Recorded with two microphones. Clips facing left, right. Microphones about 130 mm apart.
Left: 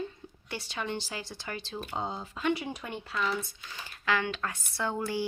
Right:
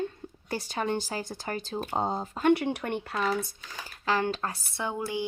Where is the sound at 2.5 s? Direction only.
60° right (ahead or behind).